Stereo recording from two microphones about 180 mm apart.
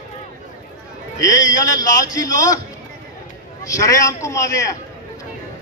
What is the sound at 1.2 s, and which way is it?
A man's voice, 20° left (ahead or behind).